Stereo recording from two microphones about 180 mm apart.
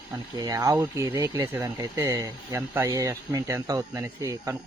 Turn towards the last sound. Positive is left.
turn(degrees=-15)  # may be behind; listen again after turning